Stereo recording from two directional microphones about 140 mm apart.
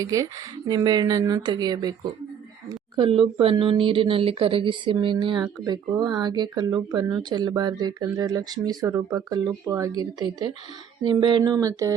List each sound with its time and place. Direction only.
0.0 s speech: 25° right (ahead or behind)
11.5 s speech: 25° right (ahead or behind)